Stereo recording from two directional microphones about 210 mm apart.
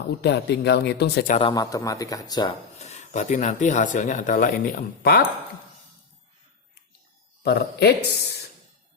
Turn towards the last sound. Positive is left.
turn(degrees=50)  # may be behind; listen again after turning